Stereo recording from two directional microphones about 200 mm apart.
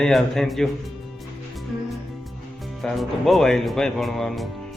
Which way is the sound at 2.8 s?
Centre (ahead or behind).